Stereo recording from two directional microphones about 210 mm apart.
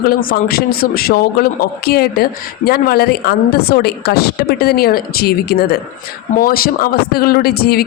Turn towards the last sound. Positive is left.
turn(degrees=45)  # may be behind; listen again after turning